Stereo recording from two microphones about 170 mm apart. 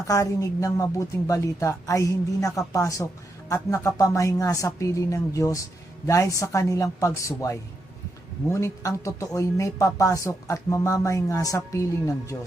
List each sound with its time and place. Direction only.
0.1 s speech: 20° left (ahead or behind)